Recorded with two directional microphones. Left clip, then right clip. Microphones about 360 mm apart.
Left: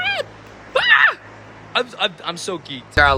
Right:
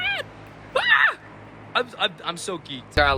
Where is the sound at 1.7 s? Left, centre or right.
Centre.